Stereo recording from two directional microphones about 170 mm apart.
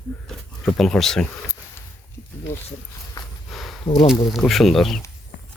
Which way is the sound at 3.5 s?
Centre (ahead or behind).